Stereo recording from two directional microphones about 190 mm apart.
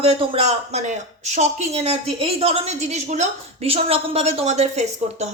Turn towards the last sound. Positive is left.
turn(degrees=-35)  # may be behind; listen again after turning